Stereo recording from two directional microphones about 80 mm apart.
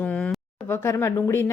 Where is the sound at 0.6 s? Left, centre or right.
Left.